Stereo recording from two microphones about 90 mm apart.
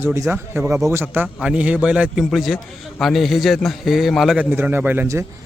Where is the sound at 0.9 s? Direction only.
25° right (ahead or behind).